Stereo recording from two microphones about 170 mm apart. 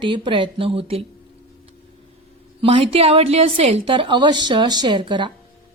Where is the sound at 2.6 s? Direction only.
35° right (ahead or behind).